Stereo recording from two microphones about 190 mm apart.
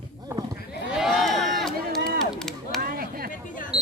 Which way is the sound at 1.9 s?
50° right (ahead or behind).